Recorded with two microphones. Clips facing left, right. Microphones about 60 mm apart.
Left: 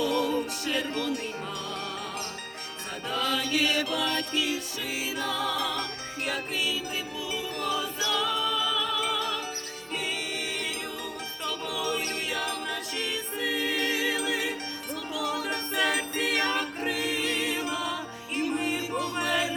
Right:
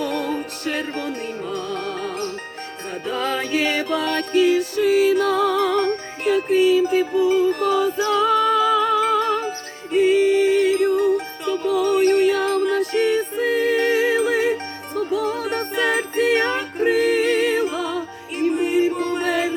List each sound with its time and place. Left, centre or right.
0.0 s music: right
3.1 s music: right
19.2 s chant: right